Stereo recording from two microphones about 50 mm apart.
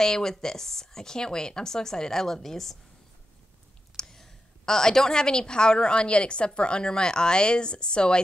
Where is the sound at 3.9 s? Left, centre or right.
Centre.